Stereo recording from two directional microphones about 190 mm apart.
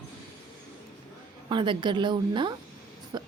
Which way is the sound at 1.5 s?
25° right (ahead or behind).